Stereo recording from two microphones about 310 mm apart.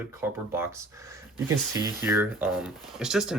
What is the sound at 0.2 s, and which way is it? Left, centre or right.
Speech, centre.